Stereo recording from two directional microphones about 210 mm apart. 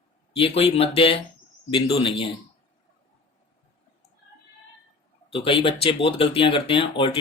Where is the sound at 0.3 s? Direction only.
25° left (ahead or behind).